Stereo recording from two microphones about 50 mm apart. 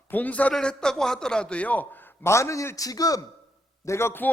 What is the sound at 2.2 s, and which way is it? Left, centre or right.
Speech, left.